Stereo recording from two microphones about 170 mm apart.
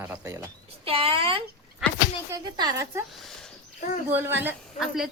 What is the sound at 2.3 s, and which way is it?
Speech, 20° right (ahead or behind).